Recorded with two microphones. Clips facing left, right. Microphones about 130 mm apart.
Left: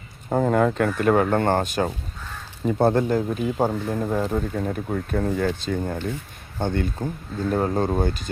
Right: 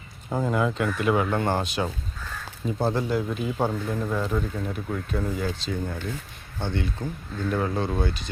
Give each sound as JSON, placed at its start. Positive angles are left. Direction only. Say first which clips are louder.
{"t": 0.3, "sound": "speech", "louder": "left 5 dB", "side_deg": 50}
{"t": 3.7, "sound": "speech", "louder": "left 3 dB", "side_deg": 30}